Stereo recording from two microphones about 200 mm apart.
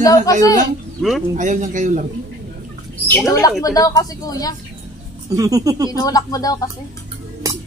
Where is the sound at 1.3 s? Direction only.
40° right (ahead or behind).